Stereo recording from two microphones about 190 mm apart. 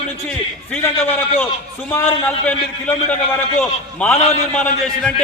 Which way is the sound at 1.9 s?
10° left (ahead or behind).